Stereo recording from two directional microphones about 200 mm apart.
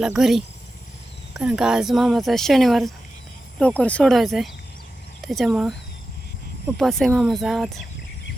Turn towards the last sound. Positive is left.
turn(degrees=0)  # may be behind; listen again after turning